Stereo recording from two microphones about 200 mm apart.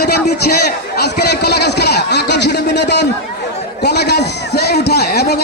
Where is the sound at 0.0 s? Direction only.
50° left (ahead or behind).